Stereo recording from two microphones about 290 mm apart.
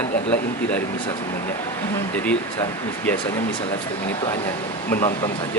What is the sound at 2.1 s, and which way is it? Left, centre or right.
Speech, centre.